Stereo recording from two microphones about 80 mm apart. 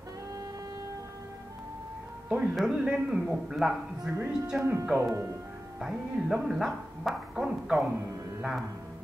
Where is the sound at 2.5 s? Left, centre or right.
Centre.